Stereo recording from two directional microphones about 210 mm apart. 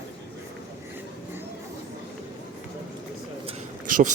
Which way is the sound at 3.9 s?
40° right (ahead or behind).